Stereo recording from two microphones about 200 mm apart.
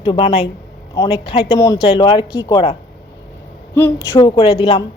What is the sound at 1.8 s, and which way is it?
Speech, 25° left (ahead or behind).